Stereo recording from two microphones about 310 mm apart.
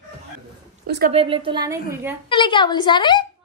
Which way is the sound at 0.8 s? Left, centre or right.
Right.